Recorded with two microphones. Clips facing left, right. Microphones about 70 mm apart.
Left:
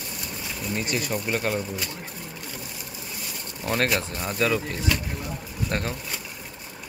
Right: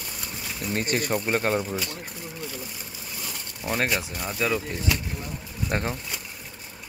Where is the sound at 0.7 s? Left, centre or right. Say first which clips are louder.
Right 3 dB; right.